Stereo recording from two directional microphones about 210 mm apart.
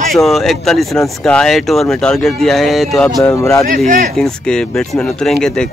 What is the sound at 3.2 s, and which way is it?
Speech, 15° left (ahead or behind).